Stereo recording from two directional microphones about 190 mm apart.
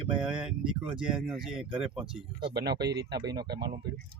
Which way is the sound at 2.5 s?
60° right (ahead or behind).